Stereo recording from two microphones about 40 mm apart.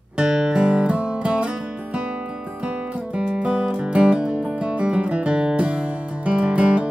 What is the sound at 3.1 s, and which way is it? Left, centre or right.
Music, right.